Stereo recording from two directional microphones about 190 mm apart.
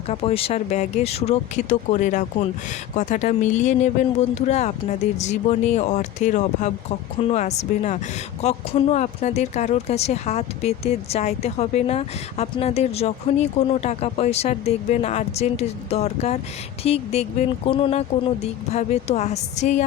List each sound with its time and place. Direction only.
0.1 s speech: 30° left (ahead or behind)